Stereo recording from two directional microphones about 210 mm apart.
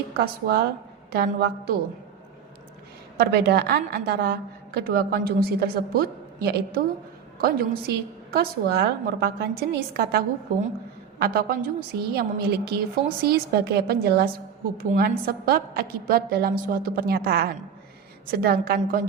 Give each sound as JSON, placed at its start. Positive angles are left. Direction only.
{"t": 0.2, "sound": "a woman's voice", "side_deg": -50}
{"t": 3.2, "sound": "a woman's voice", "side_deg": -50}